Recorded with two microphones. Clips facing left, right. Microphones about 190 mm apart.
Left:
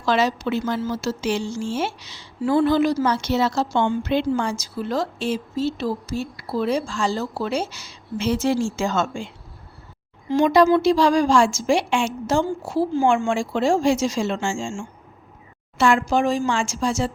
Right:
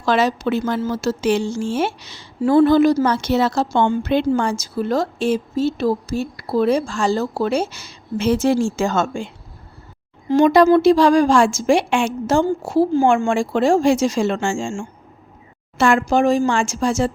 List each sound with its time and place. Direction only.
0.0 s a woman's voice: 50° right (ahead or behind)